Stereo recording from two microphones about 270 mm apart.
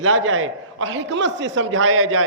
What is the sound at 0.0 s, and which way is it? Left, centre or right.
A man's voice, right.